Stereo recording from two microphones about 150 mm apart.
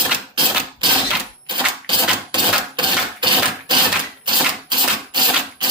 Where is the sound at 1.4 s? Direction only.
30° right (ahead or behind).